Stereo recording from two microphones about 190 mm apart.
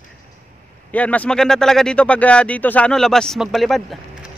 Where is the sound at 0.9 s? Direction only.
5° left (ahead or behind).